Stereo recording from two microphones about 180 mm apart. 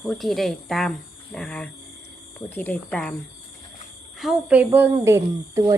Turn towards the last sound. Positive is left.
turn(degrees=-20)  # may be behind; listen again after turning